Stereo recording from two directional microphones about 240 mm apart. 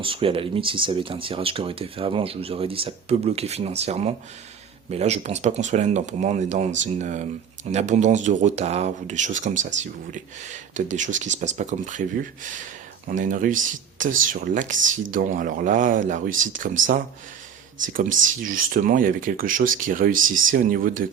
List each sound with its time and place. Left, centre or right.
0.0 s speech: right